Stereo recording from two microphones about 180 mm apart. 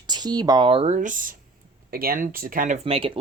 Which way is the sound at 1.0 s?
45° right (ahead or behind).